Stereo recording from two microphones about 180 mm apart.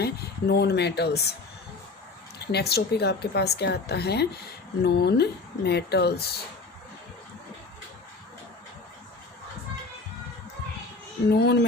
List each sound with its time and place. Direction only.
0.0 s speech: 65° left (ahead or behind)
2.5 s speech: 65° left (ahead or behind)
11.3 s speech: 65° left (ahead or behind)